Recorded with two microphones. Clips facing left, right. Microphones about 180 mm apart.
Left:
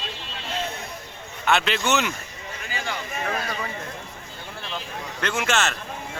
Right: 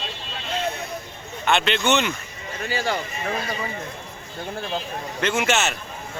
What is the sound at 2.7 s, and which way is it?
Speech, 35° right (ahead or behind).